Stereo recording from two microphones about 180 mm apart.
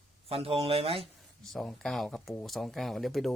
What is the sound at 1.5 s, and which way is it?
Speech, centre (ahead or behind).